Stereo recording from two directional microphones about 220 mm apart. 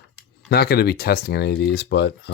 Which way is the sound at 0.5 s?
45° left (ahead or behind).